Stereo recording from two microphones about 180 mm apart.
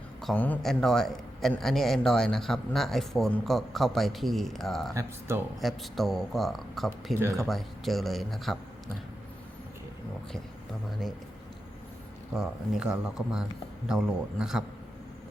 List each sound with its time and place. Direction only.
0.2 s a man's voice: 5° left (ahead or behind)
7.2 s speech: 15° right (ahead or behind)
7.4 s a man's voice: centre (ahead or behind)
12.3 s a man's voice: centre (ahead or behind)